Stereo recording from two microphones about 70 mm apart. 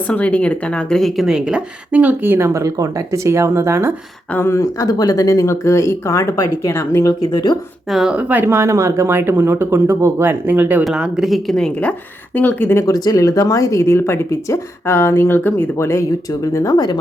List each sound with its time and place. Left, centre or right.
0.1 s speech: centre; by 2.5 s right
2.5 s speech: right
4.4 s speech: left
4.6 s speech: left
7.1 s speech: left
7.9 s speech: centre
8.1 s speech: right
8.4 s speech: right
10.4 s speech: right
10.8 s speech: centre
11.4 s speech: centre; by 12.8 s left
12.8 s speech: left
16.4 s speech: left
16.7 s speech: left